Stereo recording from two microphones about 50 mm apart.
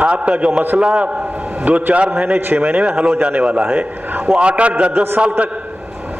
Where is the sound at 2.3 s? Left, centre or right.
Right.